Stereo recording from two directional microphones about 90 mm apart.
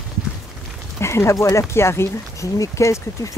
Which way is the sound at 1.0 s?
30° left (ahead or behind).